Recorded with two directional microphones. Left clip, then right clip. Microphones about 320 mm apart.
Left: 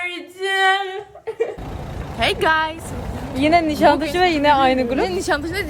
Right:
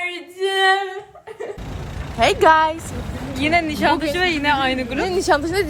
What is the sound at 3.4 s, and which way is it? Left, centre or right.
Speech, left.